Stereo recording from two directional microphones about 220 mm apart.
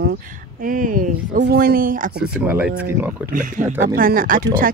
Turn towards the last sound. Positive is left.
turn(degrees=-40)  # may be behind; listen again after turning